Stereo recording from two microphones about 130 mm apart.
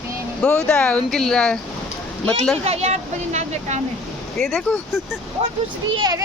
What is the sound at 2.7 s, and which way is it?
Speech, 55° right (ahead or behind).